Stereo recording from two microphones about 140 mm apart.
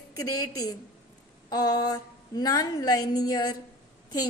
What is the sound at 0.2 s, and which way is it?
A woman's voice, 25° left (ahead or behind).